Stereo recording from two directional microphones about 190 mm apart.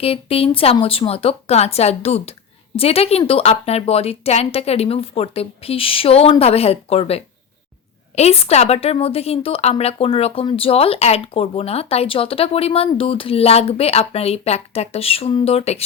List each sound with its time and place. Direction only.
0.0 s a woman's voice: 30° left (ahead or behind)